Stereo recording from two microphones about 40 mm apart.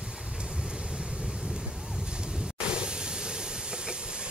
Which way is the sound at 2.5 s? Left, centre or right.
Right.